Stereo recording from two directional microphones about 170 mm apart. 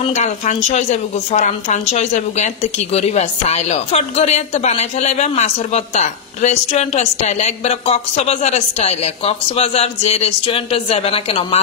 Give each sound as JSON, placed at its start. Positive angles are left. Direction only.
{"t": 0.0, "sound": "a woman's voice", "side_deg": 45}